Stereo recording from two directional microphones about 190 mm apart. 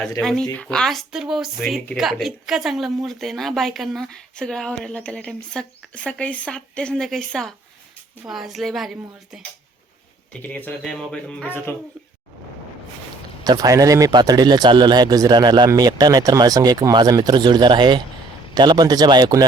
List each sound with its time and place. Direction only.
0.2 s speech: centre (ahead or behind)
13.4 s a man's voice: 20° right (ahead or behind)